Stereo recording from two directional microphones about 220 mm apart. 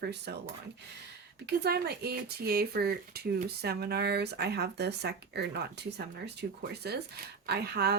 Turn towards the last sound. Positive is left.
turn(degrees=-45)  # may be behind; listen again after turning